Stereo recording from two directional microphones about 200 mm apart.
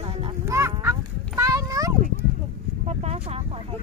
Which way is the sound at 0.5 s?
15° right (ahead or behind).